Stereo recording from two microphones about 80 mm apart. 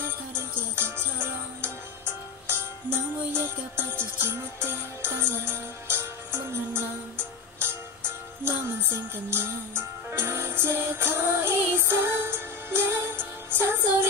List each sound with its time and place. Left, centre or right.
0.4 s music: right